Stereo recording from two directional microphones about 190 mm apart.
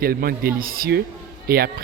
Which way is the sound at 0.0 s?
50° right (ahead or behind).